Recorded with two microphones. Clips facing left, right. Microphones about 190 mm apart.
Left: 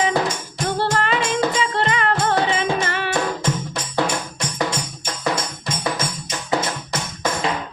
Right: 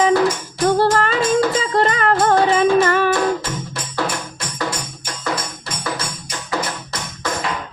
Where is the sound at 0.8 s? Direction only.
45° right (ahead or behind).